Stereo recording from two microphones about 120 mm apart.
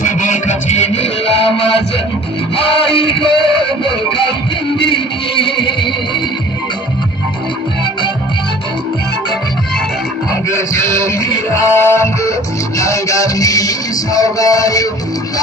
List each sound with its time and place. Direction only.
0.0 s music: 90° left; by 4.3 s 45° left (ahead or behind)
5.4 s music: 45° left (ahead or behind)
11.1 s music: 25° left (ahead or behind)